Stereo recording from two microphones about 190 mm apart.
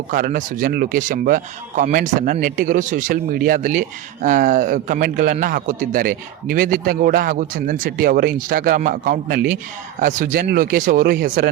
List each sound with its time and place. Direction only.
0.1 s speech: 45° right (ahead or behind)